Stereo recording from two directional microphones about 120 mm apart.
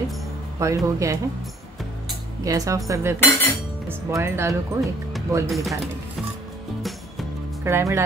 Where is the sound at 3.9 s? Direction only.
25° right (ahead or behind).